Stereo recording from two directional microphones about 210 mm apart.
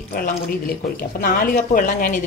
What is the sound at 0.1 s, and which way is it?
A woman's voice, 45° left (ahead or behind).